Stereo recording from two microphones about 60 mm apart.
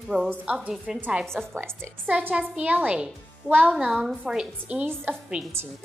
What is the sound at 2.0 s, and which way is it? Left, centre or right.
A woman's voice, right.